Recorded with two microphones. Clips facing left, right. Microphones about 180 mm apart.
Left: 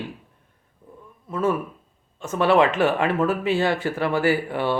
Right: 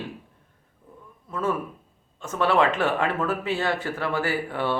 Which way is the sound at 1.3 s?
15° left (ahead or behind).